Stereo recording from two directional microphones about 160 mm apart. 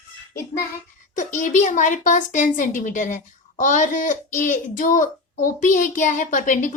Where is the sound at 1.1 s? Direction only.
50° left (ahead or behind).